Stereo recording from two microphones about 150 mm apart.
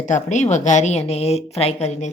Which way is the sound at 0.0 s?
55° left (ahead or behind).